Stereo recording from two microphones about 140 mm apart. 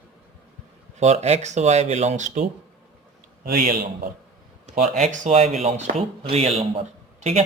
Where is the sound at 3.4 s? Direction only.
70° right (ahead or behind).